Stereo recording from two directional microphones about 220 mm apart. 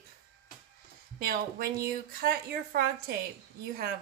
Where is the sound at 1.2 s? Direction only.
45° right (ahead or behind).